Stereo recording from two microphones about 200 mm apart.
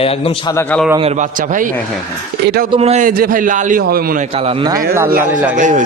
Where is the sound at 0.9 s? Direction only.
35° right (ahead or behind).